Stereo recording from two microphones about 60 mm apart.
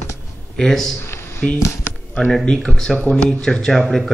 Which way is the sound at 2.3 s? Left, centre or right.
Centre.